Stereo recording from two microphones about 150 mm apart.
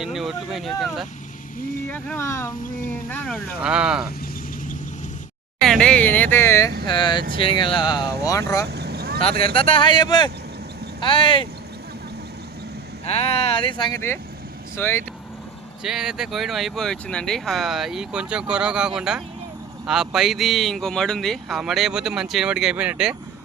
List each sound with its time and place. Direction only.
0.0 s speech: centre (ahead or behind)
1.9 s speech: 15° left (ahead or behind)
3.6 s speech: 5° right (ahead or behind)
5.6 s speech: 5° left (ahead or behind)
6.8 s speech: 30° left (ahead or behind)
8.7 s vehicle: 90° right
9.4 s speech: 40° left (ahead or behind)
13.1 s speech: 40° left (ahead or behind)
14.8 s speech: 15° left (ahead or behind)
15.8 s speech: 5° right (ahead or behind)